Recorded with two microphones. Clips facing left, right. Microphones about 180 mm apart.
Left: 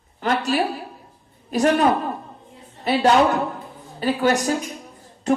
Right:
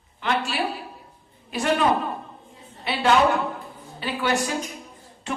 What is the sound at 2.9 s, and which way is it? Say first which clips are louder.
A woman's voice: left 3 dB; 40° left (ahead or behind).